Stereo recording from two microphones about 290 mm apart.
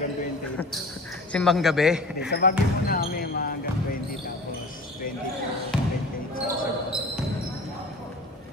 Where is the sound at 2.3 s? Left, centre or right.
Left.